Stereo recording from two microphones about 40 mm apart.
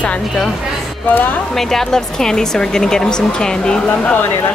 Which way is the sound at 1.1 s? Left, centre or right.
Left.